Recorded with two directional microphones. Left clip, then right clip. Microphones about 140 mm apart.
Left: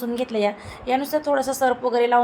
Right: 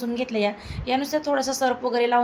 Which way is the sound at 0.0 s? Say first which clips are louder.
Left 2 dB; 15° left (ahead or behind).